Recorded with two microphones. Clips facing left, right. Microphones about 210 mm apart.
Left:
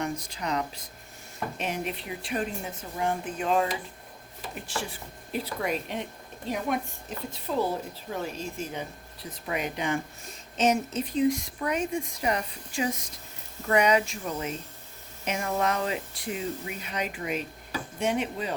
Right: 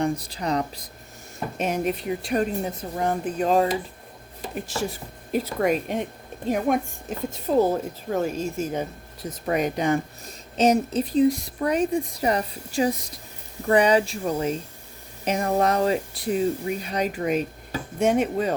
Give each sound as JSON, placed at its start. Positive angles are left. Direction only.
{"t": 0.0, "sound": "speech", "side_deg": -35}